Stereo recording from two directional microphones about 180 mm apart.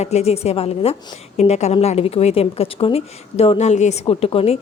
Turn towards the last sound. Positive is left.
turn(degrees=30)  # may be behind; listen again after turning